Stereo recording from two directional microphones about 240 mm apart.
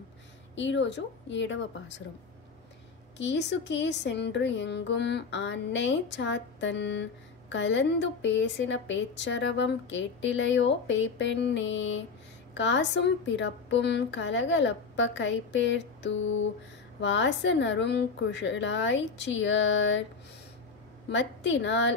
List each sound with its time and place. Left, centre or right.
0.6 s speech: left
3.2 s speech: left
21.1 s speech: left